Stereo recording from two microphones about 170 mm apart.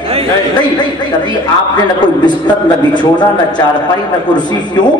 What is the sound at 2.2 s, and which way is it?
A man's voice, 25° left (ahead or behind).